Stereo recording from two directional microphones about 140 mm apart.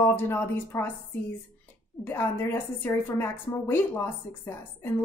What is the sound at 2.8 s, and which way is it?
A woman's voice, 15° left (ahead or behind).